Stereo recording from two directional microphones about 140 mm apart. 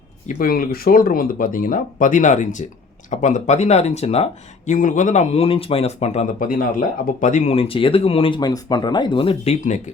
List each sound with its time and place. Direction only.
0.3 s speech: 85° left; by 6.2 s 50° left (ahead or behind)
6.4 s speech: 75° left (ahead or behind); by 7.5 s 60° left (ahead or behind)
7.5 s speech: 40° left (ahead or behind)